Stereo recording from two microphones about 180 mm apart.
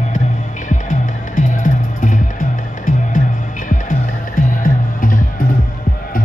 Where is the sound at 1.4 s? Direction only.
45° left (ahead or behind).